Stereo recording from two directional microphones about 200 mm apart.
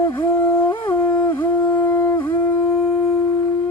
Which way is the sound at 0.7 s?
10° left (ahead or behind).